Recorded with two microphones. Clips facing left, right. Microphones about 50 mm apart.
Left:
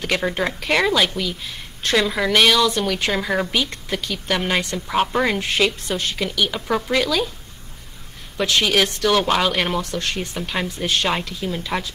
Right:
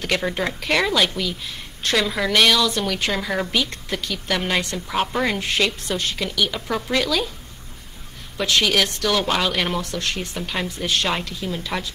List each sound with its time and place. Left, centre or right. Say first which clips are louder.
0.0 s a woman's voice: left 1 dB; centre
8.4 s a woman's voice: left 1 dB; centre
9.8 s speech: left 1 dB; left
10.3 s speech: left 1 dB; centre